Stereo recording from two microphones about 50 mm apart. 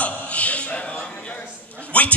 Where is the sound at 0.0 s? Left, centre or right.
Left.